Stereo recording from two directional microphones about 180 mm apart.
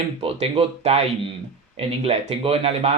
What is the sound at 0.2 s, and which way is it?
Speech, 35° right (ahead or behind).